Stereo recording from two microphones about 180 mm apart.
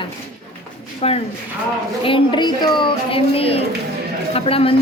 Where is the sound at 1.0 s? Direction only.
35° left (ahead or behind).